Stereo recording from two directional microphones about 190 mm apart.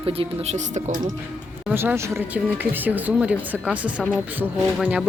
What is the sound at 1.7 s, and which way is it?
Speech, 10° right (ahead or behind).